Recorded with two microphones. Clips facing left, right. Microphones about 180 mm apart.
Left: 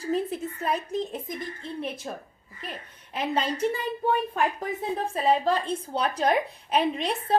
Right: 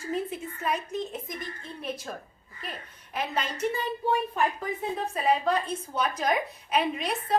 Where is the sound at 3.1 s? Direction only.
30° left (ahead or behind).